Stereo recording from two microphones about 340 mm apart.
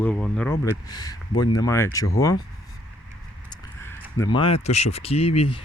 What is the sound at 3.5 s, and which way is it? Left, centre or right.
Speech, centre.